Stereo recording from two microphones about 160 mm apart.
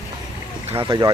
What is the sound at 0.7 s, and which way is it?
Speech, 30° right (ahead or behind).